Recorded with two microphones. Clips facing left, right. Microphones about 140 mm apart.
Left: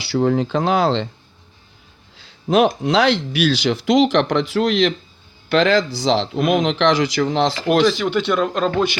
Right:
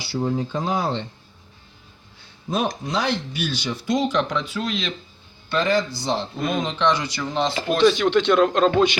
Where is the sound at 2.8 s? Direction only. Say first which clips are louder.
Left 8 dB; 90° left; by 4.9 s 70° left (ahead or behind).